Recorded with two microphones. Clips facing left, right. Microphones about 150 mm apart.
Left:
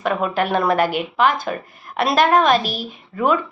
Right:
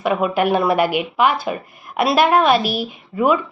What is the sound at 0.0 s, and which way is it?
A woman's voice, 10° right (ahead or behind).